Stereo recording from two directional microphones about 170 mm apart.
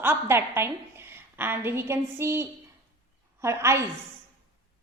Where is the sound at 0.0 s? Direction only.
15° right (ahead or behind).